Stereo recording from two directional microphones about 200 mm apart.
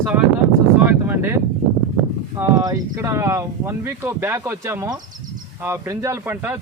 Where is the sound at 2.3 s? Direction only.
15° right (ahead or behind).